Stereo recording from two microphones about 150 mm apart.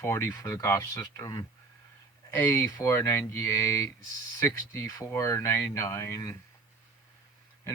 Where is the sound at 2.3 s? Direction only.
15° left (ahead or behind).